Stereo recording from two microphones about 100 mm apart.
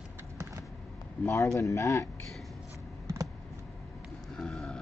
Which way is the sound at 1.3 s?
30° left (ahead or behind).